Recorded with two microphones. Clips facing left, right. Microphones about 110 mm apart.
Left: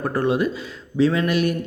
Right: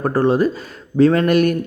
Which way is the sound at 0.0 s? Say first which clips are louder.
Right 5 dB; 35° right (ahead or behind).